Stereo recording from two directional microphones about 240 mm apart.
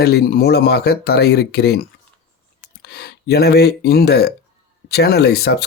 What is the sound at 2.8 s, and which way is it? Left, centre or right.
Speech, left.